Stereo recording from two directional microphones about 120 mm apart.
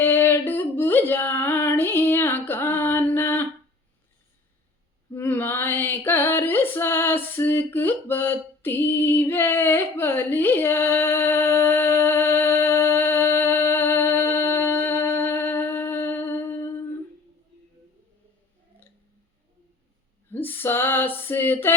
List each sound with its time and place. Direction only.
0.0 s female singing: 20° left (ahead or behind)
5.1 s female singing: 15° left (ahead or behind)
20.3 s female singing: 15° left (ahead or behind)